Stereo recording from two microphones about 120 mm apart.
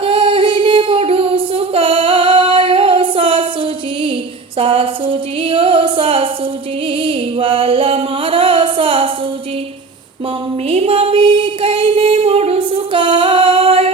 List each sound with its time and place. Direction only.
0.0 s singing: 45° right (ahead or behind)
4.5 s music: 50° right (ahead or behind)
7.0 s a sound: 45° right (ahead or behind)
10.7 s music: 55° right (ahead or behind)